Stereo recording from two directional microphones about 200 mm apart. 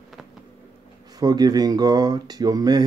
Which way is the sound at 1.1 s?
20° right (ahead or behind).